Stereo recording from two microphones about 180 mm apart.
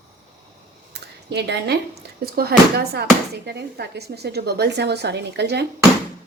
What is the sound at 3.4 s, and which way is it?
A woman's voice, 65° right (ahead or behind).